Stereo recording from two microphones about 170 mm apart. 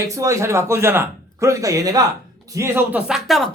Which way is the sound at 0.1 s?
20° right (ahead or behind).